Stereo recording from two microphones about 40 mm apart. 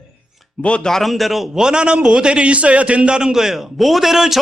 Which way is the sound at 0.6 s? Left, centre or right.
Left.